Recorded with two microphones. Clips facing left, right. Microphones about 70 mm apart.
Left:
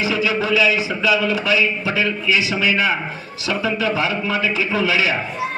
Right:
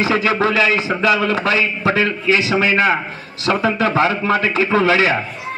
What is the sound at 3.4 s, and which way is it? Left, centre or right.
A man's voice, right.